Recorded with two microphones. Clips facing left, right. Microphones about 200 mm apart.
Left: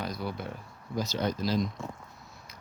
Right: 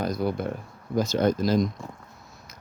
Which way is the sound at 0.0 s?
45° right (ahead or behind).